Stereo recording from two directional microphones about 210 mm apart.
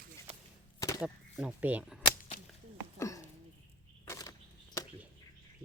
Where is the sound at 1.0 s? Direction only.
5° right (ahead or behind).